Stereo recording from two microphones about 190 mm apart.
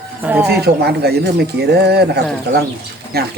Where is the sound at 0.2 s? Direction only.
10° right (ahead or behind).